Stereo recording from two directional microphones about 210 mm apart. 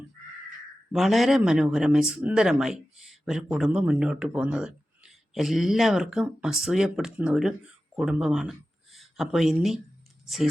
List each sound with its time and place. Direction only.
0.9 s a man's voice: centre (ahead or behind)